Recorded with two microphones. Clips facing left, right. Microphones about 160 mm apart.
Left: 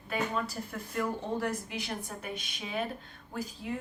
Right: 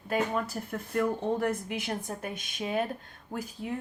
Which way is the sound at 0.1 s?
50° right (ahead or behind).